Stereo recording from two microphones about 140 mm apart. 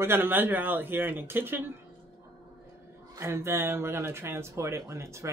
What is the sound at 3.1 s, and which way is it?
Speech, 15° right (ahead or behind).